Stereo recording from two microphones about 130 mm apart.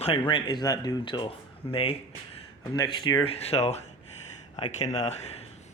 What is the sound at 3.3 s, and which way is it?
Speech, 55° left (ahead or behind).